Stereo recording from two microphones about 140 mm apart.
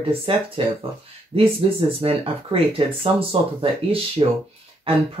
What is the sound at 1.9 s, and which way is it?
Speech, 45° right (ahead or behind).